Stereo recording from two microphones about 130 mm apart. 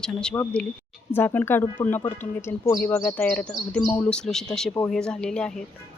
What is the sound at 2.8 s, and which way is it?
Speech, 15° left (ahead or behind).